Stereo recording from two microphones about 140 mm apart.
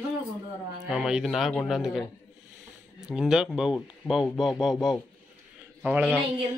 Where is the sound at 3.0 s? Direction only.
5° right (ahead or behind).